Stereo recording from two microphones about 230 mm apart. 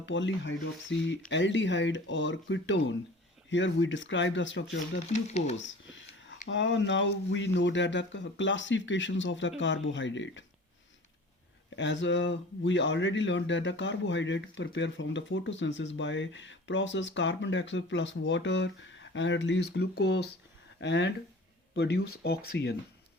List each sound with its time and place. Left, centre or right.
0.0 s speech: left
5.1 s speech: left
5.5 s a sound: left
6.5 s speech: left
11.8 s speech: left